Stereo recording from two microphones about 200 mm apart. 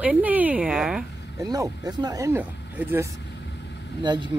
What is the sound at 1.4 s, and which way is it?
Speech, 20° right (ahead or behind).